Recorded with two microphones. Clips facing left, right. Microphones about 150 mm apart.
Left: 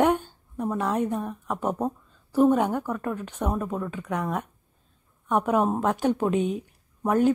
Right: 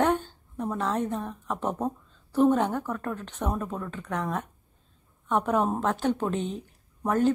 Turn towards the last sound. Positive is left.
turn(degrees=10)  # may be behind; listen again after turning